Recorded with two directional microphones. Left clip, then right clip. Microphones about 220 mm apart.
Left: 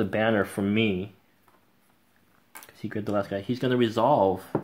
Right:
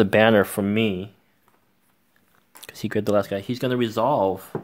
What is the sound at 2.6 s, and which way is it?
Speech, 40° right (ahead or behind).